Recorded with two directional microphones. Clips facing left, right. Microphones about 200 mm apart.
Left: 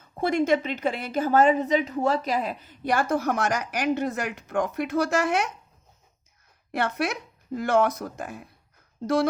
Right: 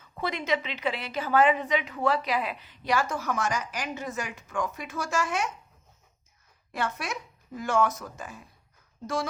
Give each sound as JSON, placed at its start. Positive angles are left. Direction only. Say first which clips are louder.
{"t": 0.0, "sound": "a woman's voice", "louder": "left 9 dB", "side_deg": 50}
{"t": 6.7, "sound": "speech", "louder": "left 6 dB", "side_deg": 65}